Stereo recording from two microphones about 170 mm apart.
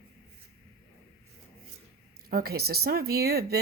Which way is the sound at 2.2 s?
65° right (ahead or behind).